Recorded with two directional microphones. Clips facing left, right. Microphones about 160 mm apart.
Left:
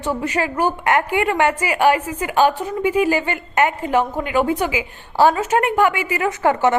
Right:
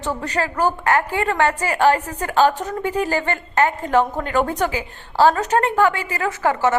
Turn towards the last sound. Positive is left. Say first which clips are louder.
# left 2 dB
turn(degrees=20)  # may be behind; listen again after turning